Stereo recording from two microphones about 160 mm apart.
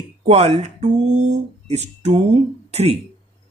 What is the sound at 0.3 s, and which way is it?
Speech, 45° right (ahead or behind).